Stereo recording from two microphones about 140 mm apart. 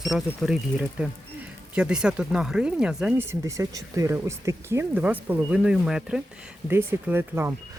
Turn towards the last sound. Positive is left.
turn(degrees=-15)  # may be behind; listen again after turning